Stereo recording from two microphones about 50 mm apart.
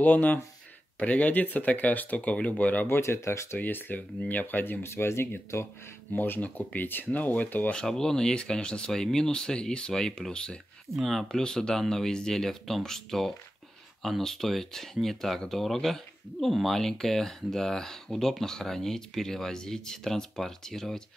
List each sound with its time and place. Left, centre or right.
0.0 s speech: left
2.9 s speech: left
3.5 s speech: left
4.9 s speech: left
6.1 s speech: left
7.1 s speech: left
7.7 s speech: centre
11.0 s speech: centre
11.2 s speech: centre